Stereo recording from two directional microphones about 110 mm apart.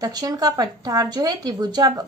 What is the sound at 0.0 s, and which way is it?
A woman's voice, 35° right (ahead or behind).